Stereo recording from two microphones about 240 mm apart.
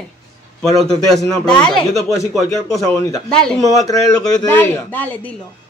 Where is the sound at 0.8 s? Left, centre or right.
Centre.